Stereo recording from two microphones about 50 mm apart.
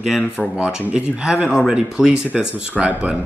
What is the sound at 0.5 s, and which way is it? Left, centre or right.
Speech, right.